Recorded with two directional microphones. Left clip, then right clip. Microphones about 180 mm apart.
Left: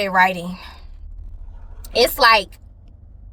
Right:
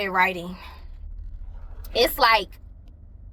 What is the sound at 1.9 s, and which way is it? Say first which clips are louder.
Speech: left 5 dB; 30° left (ahead or behind).